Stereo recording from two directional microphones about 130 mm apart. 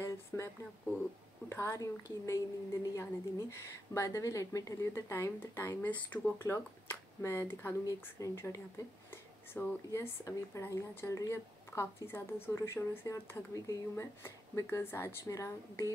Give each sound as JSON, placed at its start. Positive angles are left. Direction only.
{"t": 0.3, "sound": "a woman's voice", "side_deg": 20}
{"t": 1.5, "sound": "a woman's voice", "side_deg": 20}